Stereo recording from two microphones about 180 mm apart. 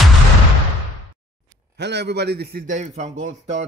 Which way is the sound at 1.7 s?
70° right (ahead or behind).